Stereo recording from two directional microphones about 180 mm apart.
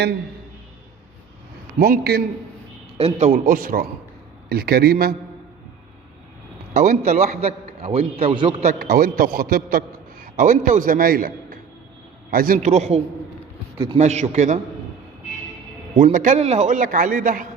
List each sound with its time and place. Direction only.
1.8 s a man's voice: 60° right (ahead or behind)
3.0 s a man's voice: 40° right (ahead or behind); by 5.1 s 60° right (ahead or behind)
6.7 s a man's voice: 40° right (ahead or behind)
8.8 s a man's voice: 55° right (ahead or behind); by 13.0 s 40° right (ahead or behind)
14.0 s a man's voice: 40° right (ahead or behind)
16.0 s a man's voice: 45° right (ahead or behind)